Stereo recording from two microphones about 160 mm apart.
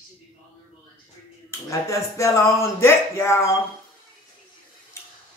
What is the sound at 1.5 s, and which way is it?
Speech, 20° left (ahead or behind).